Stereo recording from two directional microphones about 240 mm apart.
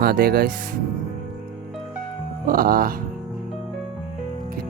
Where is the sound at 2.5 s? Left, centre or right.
Right.